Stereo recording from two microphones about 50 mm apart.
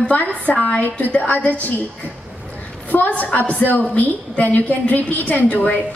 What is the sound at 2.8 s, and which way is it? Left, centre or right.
A woman's voice, left.